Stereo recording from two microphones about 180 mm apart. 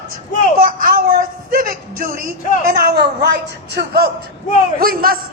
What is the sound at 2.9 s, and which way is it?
Speech, 65° right (ahead or behind).